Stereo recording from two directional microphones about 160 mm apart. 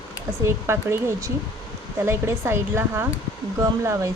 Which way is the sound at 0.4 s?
15° right (ahead or behind).